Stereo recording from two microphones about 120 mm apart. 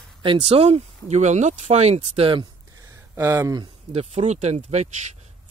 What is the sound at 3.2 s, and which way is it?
Speech, 25° right (ahead or behind).